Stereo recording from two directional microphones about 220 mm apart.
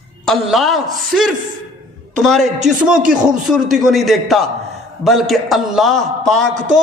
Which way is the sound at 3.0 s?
40° right (ahead or behind).